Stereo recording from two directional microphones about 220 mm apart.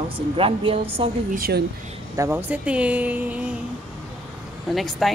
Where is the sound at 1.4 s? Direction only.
45° right (ahead or behind).